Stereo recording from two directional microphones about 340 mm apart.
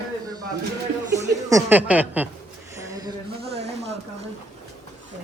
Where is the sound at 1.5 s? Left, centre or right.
Centre.